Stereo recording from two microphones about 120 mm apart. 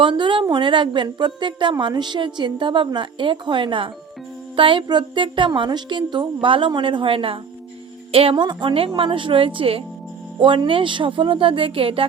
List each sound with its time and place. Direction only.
0.0 s a woman's voice: 45° right (ahead or behind)